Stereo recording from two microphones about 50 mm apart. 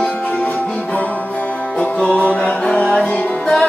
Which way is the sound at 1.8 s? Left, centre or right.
Left.